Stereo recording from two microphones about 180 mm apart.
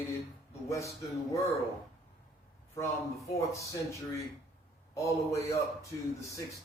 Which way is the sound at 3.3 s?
15° left (ahead or behind).